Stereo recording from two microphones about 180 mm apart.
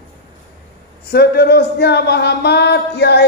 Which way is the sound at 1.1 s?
65° left (ahead or behind).